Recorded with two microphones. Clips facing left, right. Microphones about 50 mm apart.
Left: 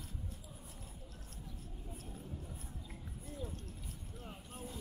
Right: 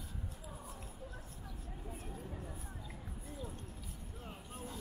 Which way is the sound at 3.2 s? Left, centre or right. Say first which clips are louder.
Left 2 dB; centre.